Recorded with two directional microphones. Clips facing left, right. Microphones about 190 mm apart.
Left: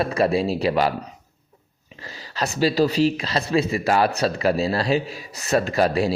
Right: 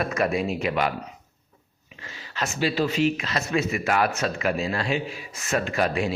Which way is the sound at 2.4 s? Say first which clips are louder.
Left 5 dB; 35° left (ahead or behind).